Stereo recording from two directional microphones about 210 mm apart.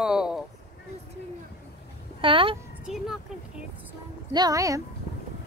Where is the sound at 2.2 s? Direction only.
25° right (ahead or behind).